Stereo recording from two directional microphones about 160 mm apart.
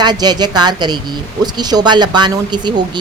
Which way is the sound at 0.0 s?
25° right (ahead or behind).